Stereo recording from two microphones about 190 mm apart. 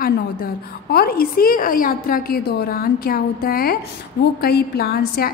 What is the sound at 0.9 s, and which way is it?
A woman's voice, 55° left (ahead or behind).